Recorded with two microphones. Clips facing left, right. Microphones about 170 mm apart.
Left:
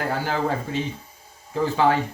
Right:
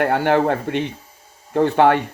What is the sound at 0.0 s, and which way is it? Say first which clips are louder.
Speech: right 8 dB; 65° right (ahead or behind).